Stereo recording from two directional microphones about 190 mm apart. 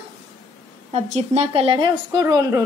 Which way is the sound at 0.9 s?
35° right (ahead or behind).